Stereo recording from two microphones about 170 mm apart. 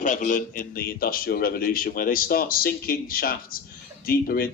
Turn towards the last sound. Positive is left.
turn(degrees=60)  # may be behind; listen again after turning